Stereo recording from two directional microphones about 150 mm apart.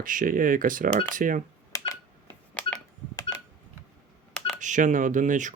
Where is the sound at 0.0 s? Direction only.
65° right (ahead or behind).